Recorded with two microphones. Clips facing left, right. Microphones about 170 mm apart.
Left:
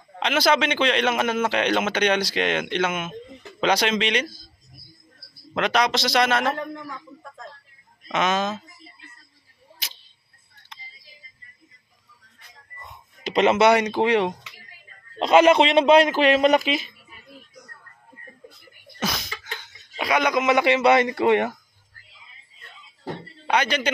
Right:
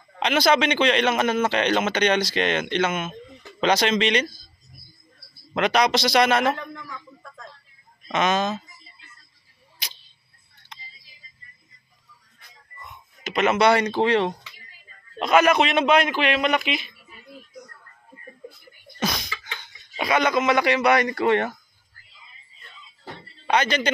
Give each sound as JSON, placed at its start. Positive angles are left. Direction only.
{"t": 0.2, "sound": "a man's voice", "side_deg": 0}
{"t": 5.5, "sound": "a man's voice", "side_deg": 0}
{"t": 8.1, "sound": "a man's voice", "side_deg": 5}
{"t": 9.8, "sound": "camera", "side_deg": 0}
{"t": 12.8, "sound": "speech", "side_deg": 30}
{"t": 15.1, "sound": "a man's voice", "side_deg": 25}
{"t": 18.9, "sound": "a sound", "side_deg": 5}
{"t": 20.0, "sound": "speech", "side_deg": 10}
{"t": 23.4, "sound": "a man's voice", "side_deg": 10}